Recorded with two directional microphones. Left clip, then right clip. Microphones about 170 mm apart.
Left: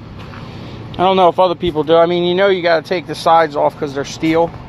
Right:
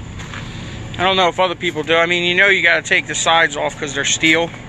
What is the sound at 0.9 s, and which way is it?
Speech, 65° left (ahead or behind).